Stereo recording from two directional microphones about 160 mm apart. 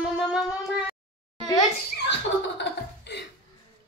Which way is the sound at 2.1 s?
90° left.